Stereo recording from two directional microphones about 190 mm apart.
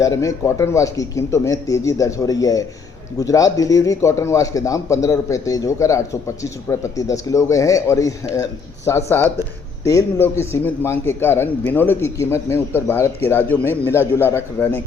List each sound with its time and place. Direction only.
0.0 s a man's voice: 15° left (ahead or behind)